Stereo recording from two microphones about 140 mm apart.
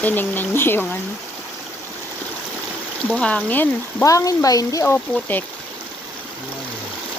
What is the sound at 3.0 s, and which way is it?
Speech, 10° left (ahead or behind).